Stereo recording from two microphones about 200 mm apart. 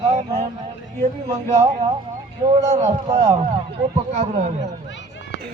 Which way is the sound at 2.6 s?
35° right (ahead or behind).